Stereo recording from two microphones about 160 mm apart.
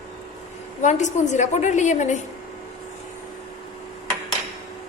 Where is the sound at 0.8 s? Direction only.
50° left (ahead or behind).